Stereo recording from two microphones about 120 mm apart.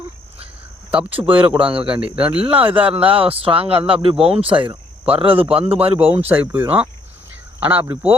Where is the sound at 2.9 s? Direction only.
50° right (ahead or behind).